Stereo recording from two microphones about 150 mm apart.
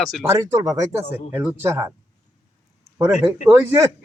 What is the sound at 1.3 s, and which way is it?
Speech, 10° right (ahead or behind).